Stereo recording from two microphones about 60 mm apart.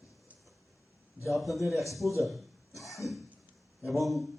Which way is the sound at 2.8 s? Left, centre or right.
Centre.